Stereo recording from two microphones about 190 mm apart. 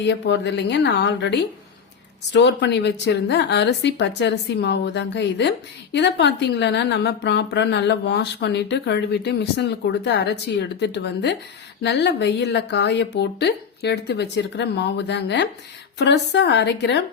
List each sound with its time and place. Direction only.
0.0 s a woman's voice: 65° left (ahead or behind)